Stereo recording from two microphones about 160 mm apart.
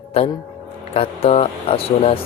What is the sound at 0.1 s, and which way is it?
Speech, 35° left (ahead or behind).